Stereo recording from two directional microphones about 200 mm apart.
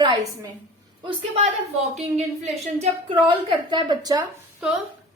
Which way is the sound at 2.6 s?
30° right (ahead or behind).